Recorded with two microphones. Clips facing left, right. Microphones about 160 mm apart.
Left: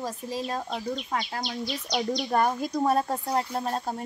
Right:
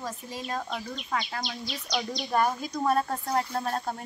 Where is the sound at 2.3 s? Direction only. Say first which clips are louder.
Left 1 dB; 40° left (ahead or behind).